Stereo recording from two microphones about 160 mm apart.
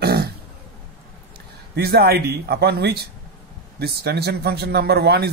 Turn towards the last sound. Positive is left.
turn(degrees=-85)